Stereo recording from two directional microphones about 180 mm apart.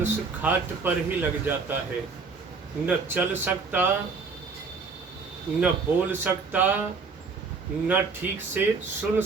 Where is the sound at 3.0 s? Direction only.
10° right (ahead or behind).